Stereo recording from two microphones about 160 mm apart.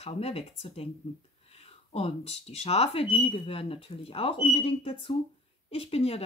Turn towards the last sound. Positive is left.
turn(degrees=40)  # may be behind; listen again after turning